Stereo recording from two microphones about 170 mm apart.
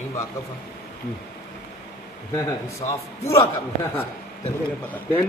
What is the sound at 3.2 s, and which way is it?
Speech, 15° left (ahead or behind).